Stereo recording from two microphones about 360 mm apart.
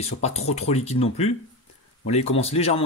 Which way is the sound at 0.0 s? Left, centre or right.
Centre.